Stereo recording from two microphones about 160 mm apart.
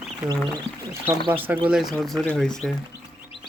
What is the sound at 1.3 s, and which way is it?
Speech, 10° right (ahead or behind).